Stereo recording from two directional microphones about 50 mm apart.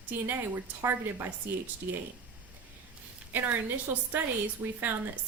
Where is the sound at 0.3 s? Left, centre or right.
Right.